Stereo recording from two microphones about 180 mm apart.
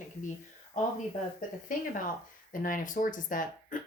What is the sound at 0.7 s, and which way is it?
Speech, 45° left (ahead or behind).